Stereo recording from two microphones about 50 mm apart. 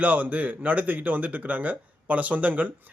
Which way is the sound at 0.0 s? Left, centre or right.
Right.